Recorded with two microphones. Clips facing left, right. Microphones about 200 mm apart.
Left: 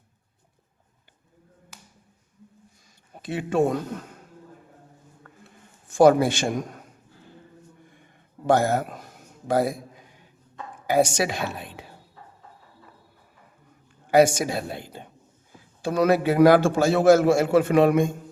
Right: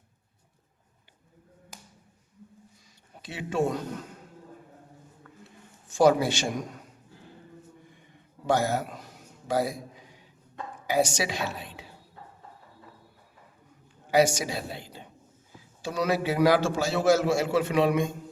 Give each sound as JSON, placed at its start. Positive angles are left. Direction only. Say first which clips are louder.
{"t": 3.2, "sound": "speech", "louder": "left 5 dB", "side_deg": 50}
{"t": 5.2, "sound": "a sound", "louder": "right 1 dB", "side_deg": 55}
{"t": 5.9, "sound": "a man's voice", "louder": "left 5 dB", "side_deg": 55}
{"t": 8.4, "sound": "a sound", "louder": "left 5 dB", "side_deg": 50}
{"t": 10.8, "sound": "a woman's voice", "louder": "left 5 dB", "side_deg": 55}
{"t": 14.1, "sound": "a man's voice", "louder": "left 5 dB", "side_deg": 55}